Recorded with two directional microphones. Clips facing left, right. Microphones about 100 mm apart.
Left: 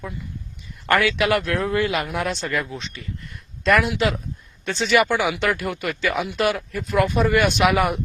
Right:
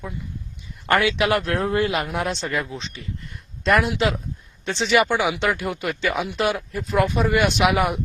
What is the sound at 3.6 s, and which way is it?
Speech, 30° right (ahead or behind).